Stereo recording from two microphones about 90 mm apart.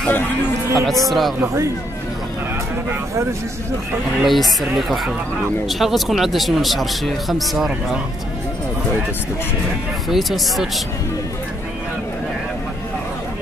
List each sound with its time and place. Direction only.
0.7 s speech: centre (ahead or behind)
1.4 s a man's voice: 30° right (ahead or behind)
4.2 s speech: centre (ahead or behind)
10.0 s speech: centre (ahead or behind)